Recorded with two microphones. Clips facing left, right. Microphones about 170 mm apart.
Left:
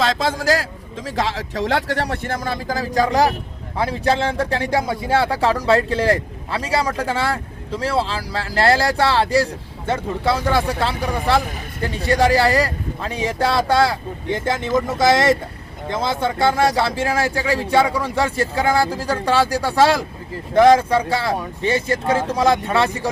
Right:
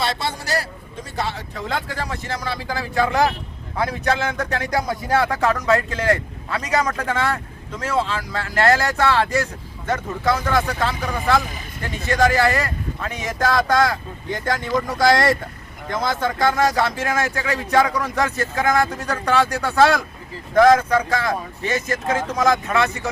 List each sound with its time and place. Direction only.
0.0 s a man's voice: 90° left; by 23.0 s 30° left (ahead or behind)